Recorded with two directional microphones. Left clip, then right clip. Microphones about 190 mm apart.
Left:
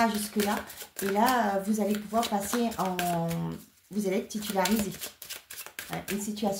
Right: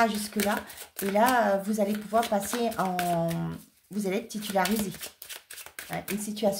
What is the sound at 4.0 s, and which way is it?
Speech, 55° right (ahead or behind).